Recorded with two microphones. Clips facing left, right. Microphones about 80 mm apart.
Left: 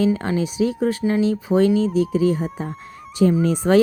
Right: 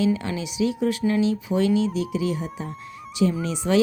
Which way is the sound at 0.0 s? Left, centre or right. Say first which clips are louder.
Left 4 dB; left.